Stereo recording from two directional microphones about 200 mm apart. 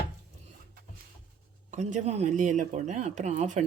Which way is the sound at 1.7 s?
35° right (ahead or behind).